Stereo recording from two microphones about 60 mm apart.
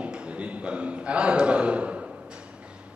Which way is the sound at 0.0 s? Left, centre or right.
Centre.